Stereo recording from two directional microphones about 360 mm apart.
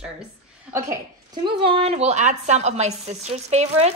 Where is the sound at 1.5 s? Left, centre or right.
Centre.